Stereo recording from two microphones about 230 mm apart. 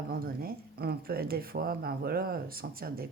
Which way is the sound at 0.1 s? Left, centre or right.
Right.